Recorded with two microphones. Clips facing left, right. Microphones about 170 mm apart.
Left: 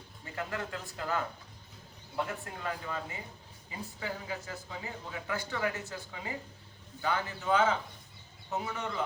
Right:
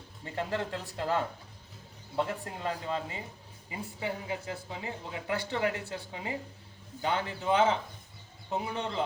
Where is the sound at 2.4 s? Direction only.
30° right (ahead or behind).